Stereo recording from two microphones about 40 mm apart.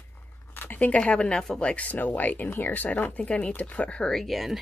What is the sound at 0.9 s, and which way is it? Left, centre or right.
Speech, left.